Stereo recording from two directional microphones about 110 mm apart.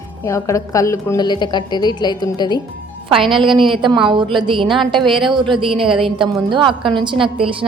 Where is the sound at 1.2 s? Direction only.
40° left (ahead or behind).